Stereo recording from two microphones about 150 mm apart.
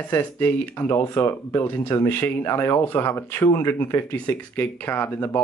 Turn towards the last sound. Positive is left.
turn(degrees=15)  # may be behind; listen again after turning